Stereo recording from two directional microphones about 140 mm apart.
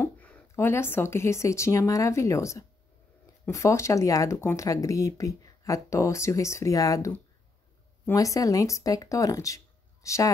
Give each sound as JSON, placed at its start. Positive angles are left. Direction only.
{"t": 0.0, "sound": "a woman's voice", "side_deg": 15}